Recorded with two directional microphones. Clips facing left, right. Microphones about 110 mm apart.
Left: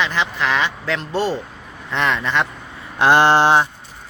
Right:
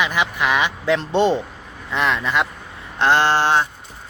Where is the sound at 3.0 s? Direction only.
15° left (ahead or behind).